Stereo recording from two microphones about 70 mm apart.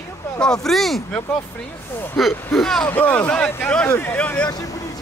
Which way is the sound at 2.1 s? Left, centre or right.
Centre.